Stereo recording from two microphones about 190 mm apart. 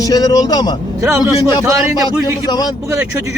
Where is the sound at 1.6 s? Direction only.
15° right (ahead or behind).